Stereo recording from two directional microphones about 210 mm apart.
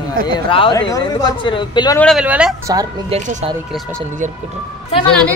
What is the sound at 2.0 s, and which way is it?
Speech, centre (ahead or behind).